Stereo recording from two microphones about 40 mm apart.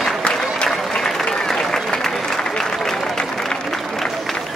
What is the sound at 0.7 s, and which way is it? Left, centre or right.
Applause, centre.